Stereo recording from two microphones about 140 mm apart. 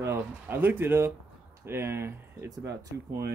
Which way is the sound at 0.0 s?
15° right (ahead or behind).